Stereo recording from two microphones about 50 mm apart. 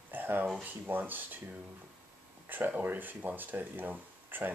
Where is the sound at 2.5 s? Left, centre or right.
Right.